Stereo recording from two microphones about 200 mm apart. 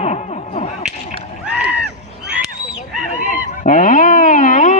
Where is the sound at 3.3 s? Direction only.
40° left (ahead or behind).